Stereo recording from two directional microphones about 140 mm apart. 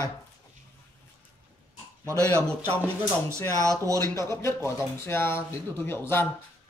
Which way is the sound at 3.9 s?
20° left (ahead or behind).